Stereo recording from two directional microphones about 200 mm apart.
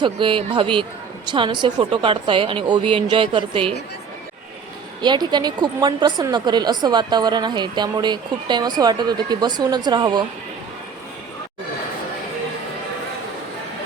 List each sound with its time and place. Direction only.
0.0 s a woman's voice: 25° right (ahead or behind)
5.0 s a woman's voice: 20° right (ahead or behind)